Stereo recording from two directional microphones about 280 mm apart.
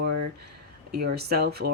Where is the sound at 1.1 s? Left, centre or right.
Right.